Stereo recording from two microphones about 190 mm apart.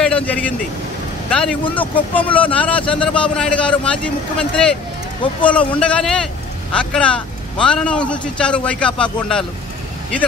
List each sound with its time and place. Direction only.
0.0 s a man's voice: 5° left (ahead or behind)